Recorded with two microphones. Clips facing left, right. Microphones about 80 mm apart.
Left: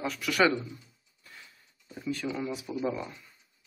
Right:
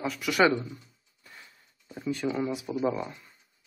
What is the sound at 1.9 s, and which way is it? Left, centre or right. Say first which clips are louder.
Speech: right 3 dB; right.